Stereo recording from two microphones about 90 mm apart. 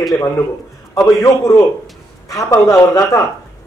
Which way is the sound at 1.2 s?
30° left (ahead or behind).